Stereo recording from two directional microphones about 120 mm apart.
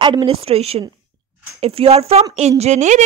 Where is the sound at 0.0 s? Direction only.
45° right (ahead or behind).